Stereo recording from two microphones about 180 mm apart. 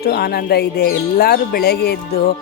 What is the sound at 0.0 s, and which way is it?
Speech, 60° left (ahead or behind).